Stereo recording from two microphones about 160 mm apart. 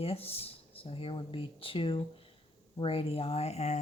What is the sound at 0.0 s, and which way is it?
Speech, 40° left (ahead or behind).